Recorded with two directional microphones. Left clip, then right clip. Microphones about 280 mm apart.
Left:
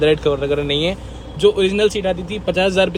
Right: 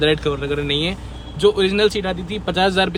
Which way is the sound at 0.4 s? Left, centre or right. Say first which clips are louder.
Left 3 dB; centre.